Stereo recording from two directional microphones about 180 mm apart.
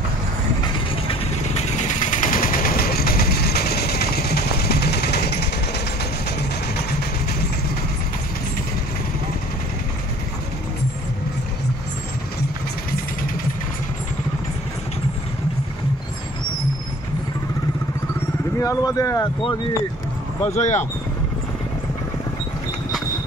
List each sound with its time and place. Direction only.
1.9 s vehicle: 45° left (ahead or behind); by 5.4 s 65° left (ahead or behind)
18.6 s speech: 20° left (ahead or behind)
20.5 s speech: 40° left (ahead or behind)